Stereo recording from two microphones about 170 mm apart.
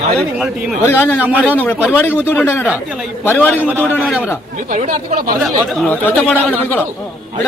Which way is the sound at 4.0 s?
Centre (ahead or behind).